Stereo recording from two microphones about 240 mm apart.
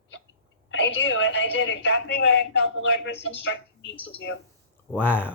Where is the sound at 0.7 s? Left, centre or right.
Left.